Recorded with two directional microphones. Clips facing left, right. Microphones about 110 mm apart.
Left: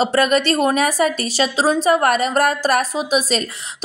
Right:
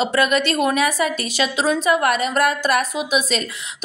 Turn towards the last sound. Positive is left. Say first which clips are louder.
# left 2 dB
turn(degrees=35)  # may be behind; listen again after turning